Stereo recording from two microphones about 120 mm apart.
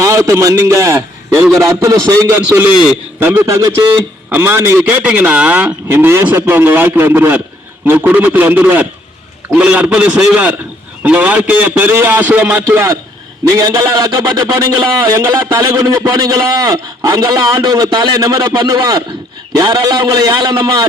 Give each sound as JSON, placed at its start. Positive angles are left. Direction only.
{"t": 0.0, "sound": "a man's voice", "side_deg": -25}